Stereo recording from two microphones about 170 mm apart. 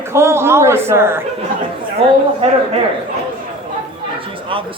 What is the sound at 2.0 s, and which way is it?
Speech, 30° right (ahead or behind).